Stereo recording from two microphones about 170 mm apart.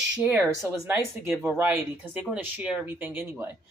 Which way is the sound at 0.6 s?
20° right (ahead or behind).